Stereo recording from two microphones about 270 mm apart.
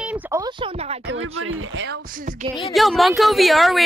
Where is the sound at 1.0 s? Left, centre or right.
Right.